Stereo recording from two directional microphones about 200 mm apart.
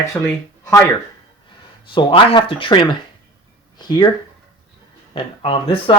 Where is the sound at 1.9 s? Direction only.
25° left (ahead or behind).